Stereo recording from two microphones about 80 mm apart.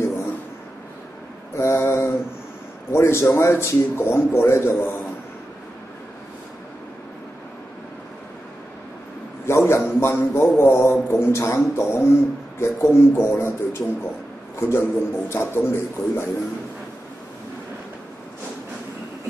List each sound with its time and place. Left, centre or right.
1.6 s mantra: left
2.9 s a man's voice: left
9.5 s a sound: left
10.6 s a man's voice: left